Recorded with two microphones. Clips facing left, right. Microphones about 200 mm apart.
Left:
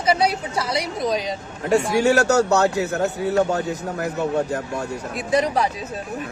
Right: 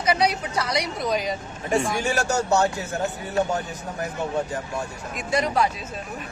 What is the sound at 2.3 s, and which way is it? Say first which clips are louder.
A man's voice: left 4 dB; 70° left (ahead or behind).